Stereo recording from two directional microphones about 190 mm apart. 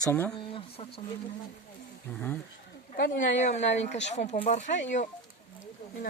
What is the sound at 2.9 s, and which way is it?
Speech, 60° left (ahead or behind).